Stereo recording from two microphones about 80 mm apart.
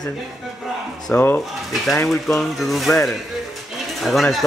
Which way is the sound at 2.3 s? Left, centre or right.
Centre.